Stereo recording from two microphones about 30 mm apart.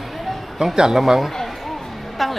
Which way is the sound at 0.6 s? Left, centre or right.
Right.